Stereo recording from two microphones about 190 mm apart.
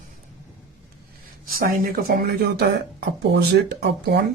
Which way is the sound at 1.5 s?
50° right (ahead or behind).